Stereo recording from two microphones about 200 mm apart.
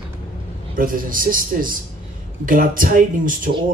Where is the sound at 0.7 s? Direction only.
45° right (ahead or behind).